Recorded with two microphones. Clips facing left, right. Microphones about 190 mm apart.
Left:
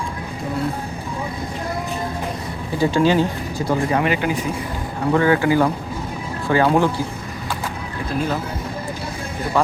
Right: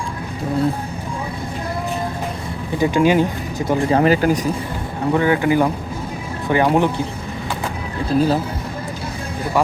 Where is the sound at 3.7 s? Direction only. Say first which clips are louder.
Right 4 dB; 30° right (ahead or behind).